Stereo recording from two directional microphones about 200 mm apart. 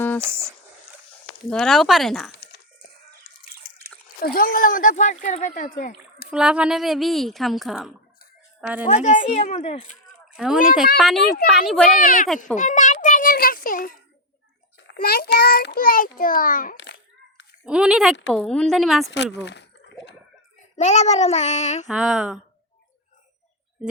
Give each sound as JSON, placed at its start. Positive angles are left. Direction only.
{"t": 0.2, "sound": "speech", "side_deg": -10}
{"t": 1.5, "sound": "speech", "side_deg": 0}
{"t": 4.2, "sound": "speech", "side_deg": 45}
{"t": 6.3, "sound": "speech", "side_deg": -5}
{"t": 9.0, "sound": "speech", "side_deg": 40}
{"t": 10.3, "sound": "speech", "side_deg": -5}
{"t": 11.9, "sound": "a child's voice", "side_deg": 45}
{"t": 16.7, "sound": "a sound", "side_deg": 65}
{"t": 17.7, "sound": "speech", "side_deg": -5}
{"t": 19.1, "sound": "speech", "side_deg": 60}
{"t": 20.7, "sound": "speech", "side_deg": 35}
{"t": 21.8, "sound": "speech", "side_deg": 0}